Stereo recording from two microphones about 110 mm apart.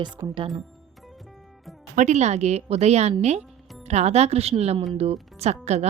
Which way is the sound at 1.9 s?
90° right.